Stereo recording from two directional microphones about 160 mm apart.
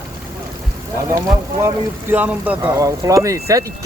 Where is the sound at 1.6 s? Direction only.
15° right (ahead or behind).